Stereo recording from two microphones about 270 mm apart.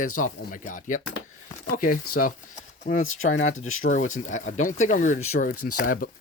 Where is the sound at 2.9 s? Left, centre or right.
Left.